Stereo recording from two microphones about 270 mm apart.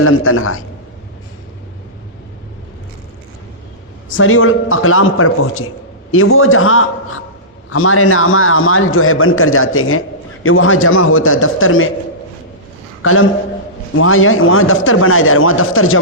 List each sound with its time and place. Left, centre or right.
0.0 s a man's voice: left
4.1 s a man's voice: left
13.0 s a man's voice: left